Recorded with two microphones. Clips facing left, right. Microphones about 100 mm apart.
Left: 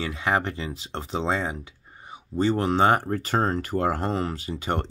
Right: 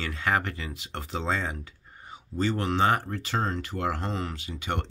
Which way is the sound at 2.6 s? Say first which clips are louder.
Left 3 dB; 35° left (ahead or behind).